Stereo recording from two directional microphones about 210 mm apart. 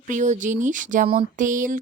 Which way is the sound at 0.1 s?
35° right (ahead or behind).